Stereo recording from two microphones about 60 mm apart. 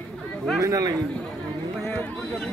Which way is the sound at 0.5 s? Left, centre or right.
Right.